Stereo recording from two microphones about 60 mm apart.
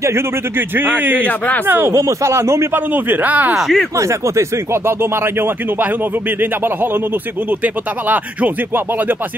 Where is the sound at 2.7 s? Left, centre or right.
Right.